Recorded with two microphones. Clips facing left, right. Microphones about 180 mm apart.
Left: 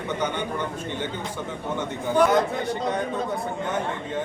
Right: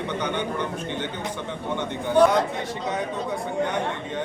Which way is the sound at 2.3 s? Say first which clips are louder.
Left 2 dB; centre (ahead or behind).